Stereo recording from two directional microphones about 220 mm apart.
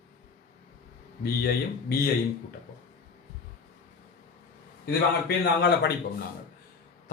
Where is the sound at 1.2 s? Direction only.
45° left (ahead or behind).